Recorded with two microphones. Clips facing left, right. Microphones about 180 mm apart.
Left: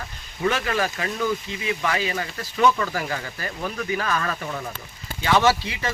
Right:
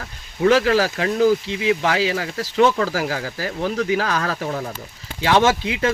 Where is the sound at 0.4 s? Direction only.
90° right.